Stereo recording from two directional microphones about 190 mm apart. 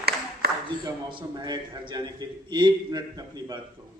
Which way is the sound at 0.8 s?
25° right (ahead or behind).